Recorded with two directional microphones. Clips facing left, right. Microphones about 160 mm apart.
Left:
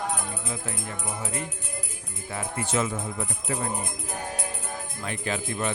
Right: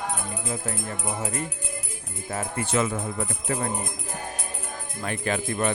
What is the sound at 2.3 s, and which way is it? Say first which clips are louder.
Speech: right 2 dB; 60° right (ahead or behind).